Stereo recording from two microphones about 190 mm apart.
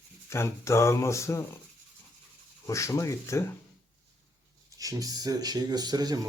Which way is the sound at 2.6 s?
15° left (ahead or behind).